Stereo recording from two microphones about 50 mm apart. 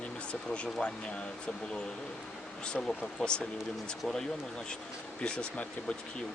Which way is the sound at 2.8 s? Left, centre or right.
Centre.